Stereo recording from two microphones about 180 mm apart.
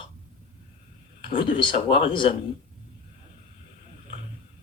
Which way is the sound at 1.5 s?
30° left (ahead or behind).